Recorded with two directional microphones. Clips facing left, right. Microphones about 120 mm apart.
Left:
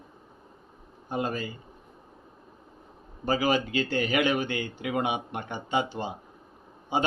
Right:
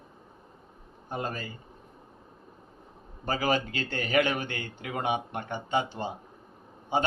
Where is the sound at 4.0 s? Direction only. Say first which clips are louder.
Right 2 dB; 35° right (ahead or behind).